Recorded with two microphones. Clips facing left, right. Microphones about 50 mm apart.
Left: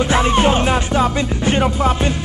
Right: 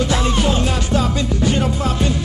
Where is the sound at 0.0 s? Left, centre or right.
Left.